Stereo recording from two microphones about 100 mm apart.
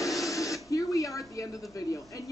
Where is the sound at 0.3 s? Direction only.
35° left (ahead or behind).